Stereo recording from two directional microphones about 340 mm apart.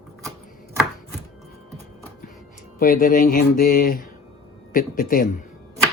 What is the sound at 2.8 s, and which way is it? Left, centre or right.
Speech, left.